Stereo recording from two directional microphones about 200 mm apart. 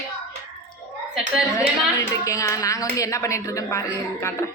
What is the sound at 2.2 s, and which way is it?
A woman's voice, 15° left (ahead or behind).